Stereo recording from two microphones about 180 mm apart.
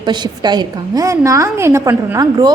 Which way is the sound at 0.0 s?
25° right (ahead or behind).